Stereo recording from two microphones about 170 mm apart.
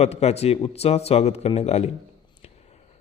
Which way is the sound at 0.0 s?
40° left (ahead or behind).